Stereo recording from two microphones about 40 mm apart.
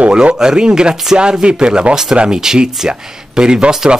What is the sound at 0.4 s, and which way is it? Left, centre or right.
Speech, right.